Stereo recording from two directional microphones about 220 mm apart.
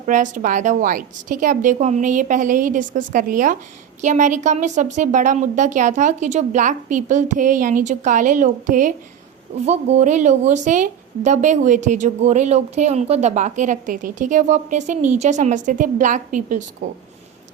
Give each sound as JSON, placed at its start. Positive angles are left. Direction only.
{"t": 0.0, "sound": "a woman's voice", "side_deg": -35}